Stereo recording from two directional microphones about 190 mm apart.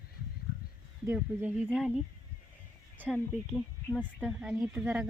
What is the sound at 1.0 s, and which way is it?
Speech, 10° right (ahead or behind).